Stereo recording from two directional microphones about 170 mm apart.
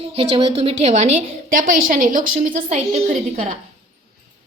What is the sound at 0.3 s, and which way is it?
A woman's voice, 40° right (ahead or behind).